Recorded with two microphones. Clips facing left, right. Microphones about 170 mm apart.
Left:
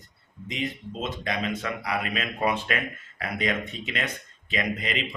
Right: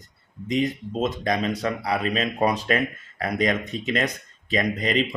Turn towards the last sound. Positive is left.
turn(degrees=-40)  # may be behind; listen again after turning